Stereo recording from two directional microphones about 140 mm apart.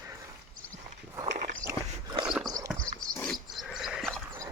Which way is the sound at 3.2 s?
Centre (ahead or behind).